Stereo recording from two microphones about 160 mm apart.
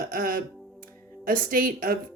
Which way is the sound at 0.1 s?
65° right (ahead or behind).